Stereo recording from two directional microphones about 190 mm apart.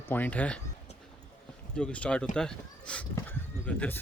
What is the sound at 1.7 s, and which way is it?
Speech, 5° left (ahead or behind).